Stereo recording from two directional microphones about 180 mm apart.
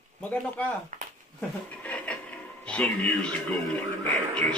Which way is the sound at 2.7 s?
10° left (ahead or behind).